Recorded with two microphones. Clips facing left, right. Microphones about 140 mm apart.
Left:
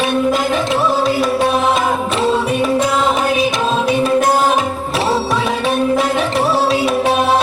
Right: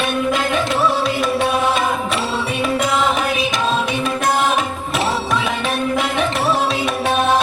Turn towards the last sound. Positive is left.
turn(degrees=35)  # may be behind; listen again after turning